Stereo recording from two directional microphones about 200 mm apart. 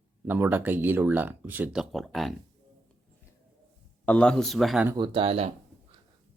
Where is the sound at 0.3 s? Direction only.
10° right (ahead or behind).